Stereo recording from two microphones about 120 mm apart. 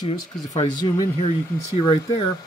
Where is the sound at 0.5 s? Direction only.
30° left (ahead or behind).